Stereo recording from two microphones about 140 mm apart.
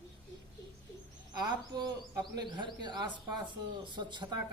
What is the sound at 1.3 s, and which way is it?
A woman's voice, 30° right (ahead or behind).